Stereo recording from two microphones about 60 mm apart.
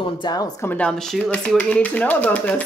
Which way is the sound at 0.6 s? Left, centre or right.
Left.